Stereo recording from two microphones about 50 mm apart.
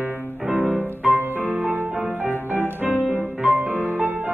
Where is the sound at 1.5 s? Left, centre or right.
Right.